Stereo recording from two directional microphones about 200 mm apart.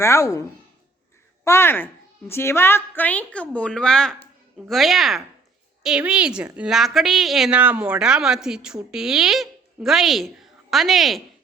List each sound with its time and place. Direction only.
0.0 s a woman's voice: 15° left (ahead or behind)
1.5 s a woman's voice: 10° left (ahead or behind)